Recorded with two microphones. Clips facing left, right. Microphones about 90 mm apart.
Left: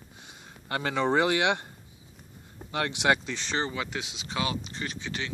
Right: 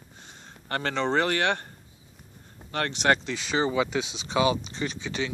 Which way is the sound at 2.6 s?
15° left (ahead or behind).